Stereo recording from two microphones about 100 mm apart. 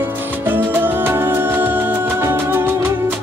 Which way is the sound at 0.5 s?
20° right (ahead or behind).